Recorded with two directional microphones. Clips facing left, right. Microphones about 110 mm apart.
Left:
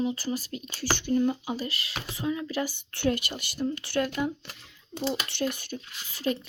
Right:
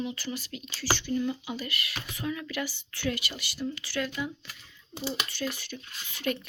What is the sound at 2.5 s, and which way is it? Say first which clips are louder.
A woman's voice: left 4 dB; 45° left (ahead or behind).